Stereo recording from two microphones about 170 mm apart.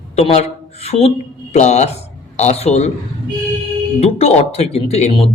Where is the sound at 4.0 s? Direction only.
35° left (ahead or behind).